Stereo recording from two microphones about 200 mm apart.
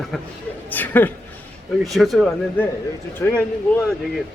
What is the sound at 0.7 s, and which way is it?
A woman's voice, 10° left (ahead or behind).